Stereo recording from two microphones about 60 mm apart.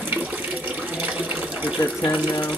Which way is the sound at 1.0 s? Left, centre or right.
Right.